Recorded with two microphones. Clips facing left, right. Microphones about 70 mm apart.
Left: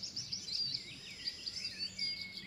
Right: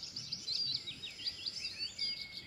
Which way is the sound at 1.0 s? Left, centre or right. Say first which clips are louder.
Right 1 dB; left.